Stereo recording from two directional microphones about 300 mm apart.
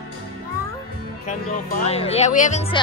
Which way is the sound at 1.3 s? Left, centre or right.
Left.